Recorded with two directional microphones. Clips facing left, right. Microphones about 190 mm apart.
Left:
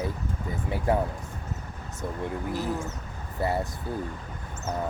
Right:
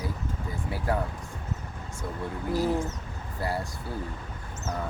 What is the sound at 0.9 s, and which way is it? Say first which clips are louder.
Speech: left 4 dB; 20° left (ahead or behind).